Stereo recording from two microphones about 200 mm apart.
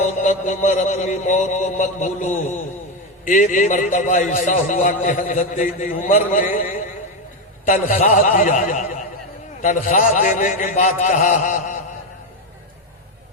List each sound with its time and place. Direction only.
0.2 s a man's voice: 35° left (ahead or behind)